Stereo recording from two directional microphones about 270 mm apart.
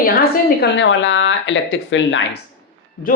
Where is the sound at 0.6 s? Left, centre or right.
Left.